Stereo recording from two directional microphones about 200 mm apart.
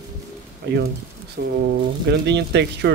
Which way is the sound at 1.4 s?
55° right (ahead or behind).